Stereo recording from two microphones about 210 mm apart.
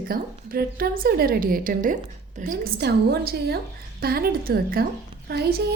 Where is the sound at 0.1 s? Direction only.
45° right (ahead or behind).